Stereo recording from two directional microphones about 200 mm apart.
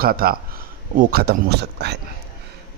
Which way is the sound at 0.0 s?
50° right (ahead or behind).